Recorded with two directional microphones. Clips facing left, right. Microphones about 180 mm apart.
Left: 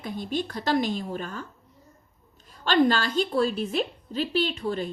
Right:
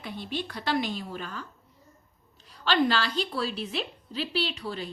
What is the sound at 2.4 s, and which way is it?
A woman's voice, 45° left (ahead or behind).